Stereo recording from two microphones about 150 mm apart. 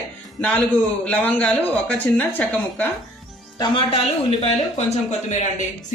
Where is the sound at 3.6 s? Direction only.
35° left (ahead or behind).